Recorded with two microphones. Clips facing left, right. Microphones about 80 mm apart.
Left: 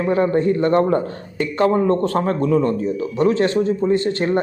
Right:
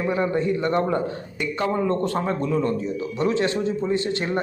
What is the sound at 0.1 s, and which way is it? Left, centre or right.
A man's voice, left.